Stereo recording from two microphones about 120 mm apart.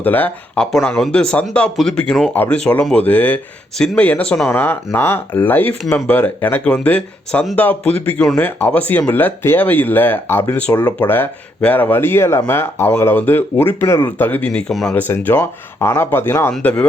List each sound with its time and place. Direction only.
0.0 s speech: 15° left (ahead or behind)
14.7 s speech: centre (ahead or behind)
14.9 s speech: 15° left (ahead or behind)